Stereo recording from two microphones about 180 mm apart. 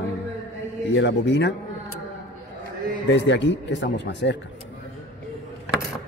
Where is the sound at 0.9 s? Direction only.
75° left (ahead or behind).